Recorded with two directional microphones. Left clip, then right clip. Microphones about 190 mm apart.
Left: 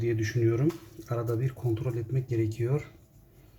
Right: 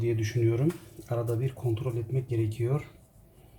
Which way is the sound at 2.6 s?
25° left (ahead or behind).